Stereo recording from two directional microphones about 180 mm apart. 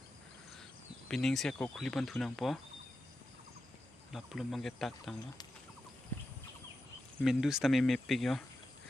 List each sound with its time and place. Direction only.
1.0 s speech: centre (ahead or behind)
4.1 s speech: centre (ahead or behind)
6.1 s bird: 10° left (ahead or behind)
7.2 s speech: centre (ahead or behind)